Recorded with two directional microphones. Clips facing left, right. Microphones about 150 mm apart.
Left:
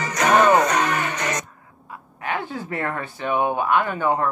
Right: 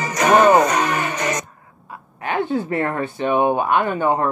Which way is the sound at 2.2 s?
25° right (ahead or behind).